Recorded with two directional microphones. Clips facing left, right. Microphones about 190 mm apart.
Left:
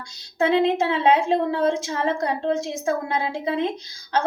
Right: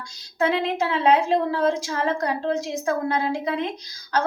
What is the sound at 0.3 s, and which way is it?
A woman's voice, 25° left (ahead or behind).